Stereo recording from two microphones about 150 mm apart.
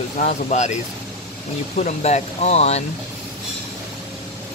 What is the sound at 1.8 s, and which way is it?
Speech, 50° left (ahead or behind).